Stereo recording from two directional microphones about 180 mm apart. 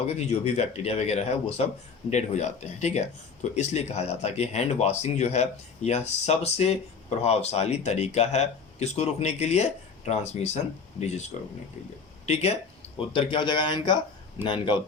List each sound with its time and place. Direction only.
0.2 s speech: 35° left (ahead or behind)